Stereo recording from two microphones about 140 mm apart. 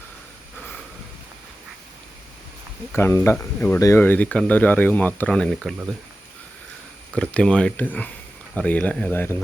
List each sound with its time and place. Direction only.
2.9 s speech: 15° left (ahead or behind)
7.1 s speech: 10° left (ahead or behind)